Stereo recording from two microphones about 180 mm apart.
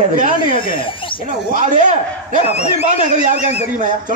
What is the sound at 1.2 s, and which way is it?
Speech, 45° right (ahead or behind).